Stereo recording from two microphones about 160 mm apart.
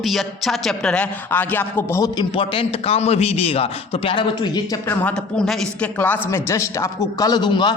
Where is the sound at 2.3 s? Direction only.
35° left (ahead or behind).